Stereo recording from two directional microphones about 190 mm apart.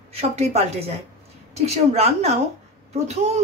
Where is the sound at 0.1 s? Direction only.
35° right (ahead or behind).